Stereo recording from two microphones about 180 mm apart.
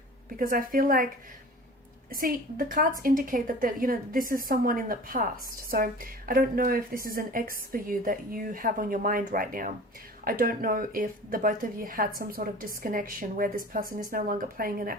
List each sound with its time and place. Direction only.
0.3 s a woman's voice: 50° right (ahead or behind)
2.0 s a woman's voice: 50° right (ahead or behind)